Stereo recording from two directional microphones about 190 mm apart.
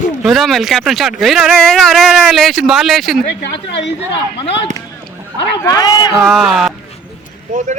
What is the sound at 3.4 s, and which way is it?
Speech, 65° left (ahead or behind).